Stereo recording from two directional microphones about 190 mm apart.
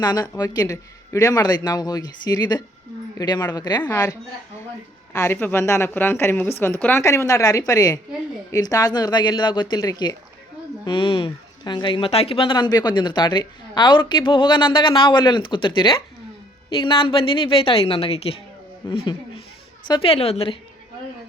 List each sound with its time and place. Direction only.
0.0 s a woman's voice: 20° left (ahead or behind)